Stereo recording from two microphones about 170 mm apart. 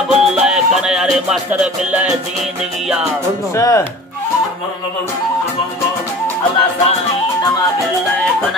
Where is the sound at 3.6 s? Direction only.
20° left (ahead or behind).